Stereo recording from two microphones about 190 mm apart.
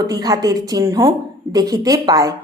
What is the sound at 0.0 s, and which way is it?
Speech, 20° right (ahead or behind).